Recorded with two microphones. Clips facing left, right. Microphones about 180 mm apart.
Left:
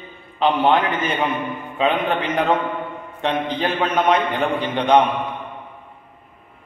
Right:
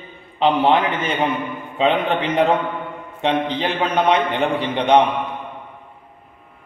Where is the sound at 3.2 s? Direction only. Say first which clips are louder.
Right 2 dB; 25° right (ahead or behind).